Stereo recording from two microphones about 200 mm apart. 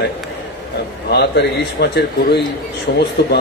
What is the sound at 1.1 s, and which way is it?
A man's voice, 55° left (ahead or behind).